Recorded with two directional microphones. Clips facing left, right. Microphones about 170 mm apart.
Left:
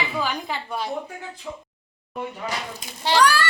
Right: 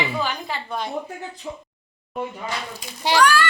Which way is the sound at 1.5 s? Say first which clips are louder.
Right 1 dB; 25° right (ahead or behind).